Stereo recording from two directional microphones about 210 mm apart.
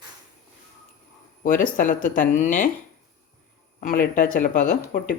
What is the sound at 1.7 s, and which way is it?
Speech, 40° left (ahead or behind).